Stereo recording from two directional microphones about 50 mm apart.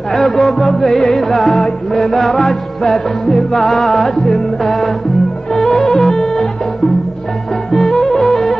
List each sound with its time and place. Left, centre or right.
0.1 s music: centre
7.7 s music: centre